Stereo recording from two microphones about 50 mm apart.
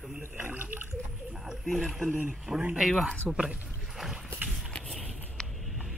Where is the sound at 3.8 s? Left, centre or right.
Centre.